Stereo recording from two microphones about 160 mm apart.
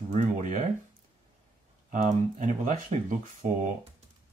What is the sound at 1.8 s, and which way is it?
Speech, 50° right (ahead or behind).